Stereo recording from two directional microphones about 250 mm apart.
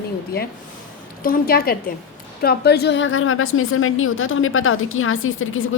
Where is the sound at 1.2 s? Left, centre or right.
Left.